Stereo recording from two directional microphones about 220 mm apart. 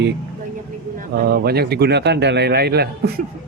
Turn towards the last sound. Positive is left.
turn(degrees=-45)  # may be behind; listen again after turning